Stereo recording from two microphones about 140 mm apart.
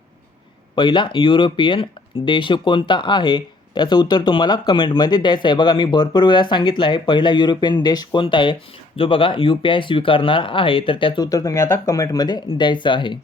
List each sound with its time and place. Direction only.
0.8 s speech: 35° left (ahead or behind)